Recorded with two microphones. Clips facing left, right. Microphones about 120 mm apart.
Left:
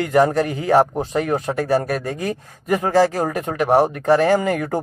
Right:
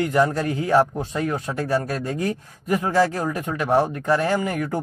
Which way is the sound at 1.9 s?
70° left (ahead or behind).